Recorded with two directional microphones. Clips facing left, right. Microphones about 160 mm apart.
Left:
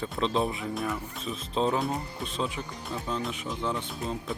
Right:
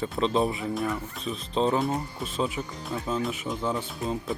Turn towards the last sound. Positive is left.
turn(degrees=-5)  # may be behind; listen again after turning